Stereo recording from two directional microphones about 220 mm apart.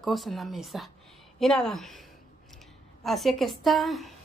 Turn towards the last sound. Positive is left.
turn(degrees=0)  # may be behind; listen again after turning